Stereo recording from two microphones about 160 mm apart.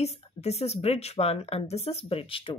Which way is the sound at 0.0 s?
40° left (ahead or behind).